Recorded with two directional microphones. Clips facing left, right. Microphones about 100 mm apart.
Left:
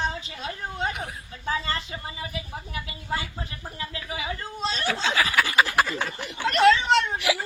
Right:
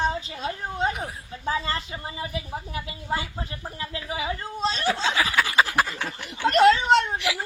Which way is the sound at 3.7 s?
30° right (ahead or behind).